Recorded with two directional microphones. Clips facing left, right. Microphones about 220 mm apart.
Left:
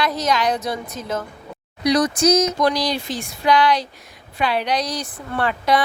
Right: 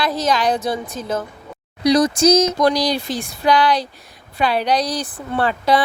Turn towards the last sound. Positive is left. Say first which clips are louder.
# right 2 dB
turn(degrees=-30)  # may be behind; listen again after turning